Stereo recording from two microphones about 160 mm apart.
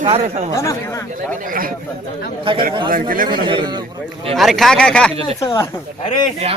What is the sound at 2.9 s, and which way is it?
Speech, 60° right (ahead or behind).